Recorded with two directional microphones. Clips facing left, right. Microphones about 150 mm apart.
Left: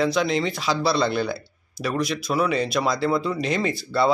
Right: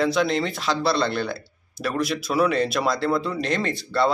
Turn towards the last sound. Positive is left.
turn(degrees=5)  # may be behind; listen again after turning